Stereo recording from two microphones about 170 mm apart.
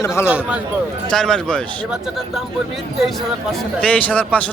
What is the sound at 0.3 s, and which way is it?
Speech, 5° right (ahead or behind).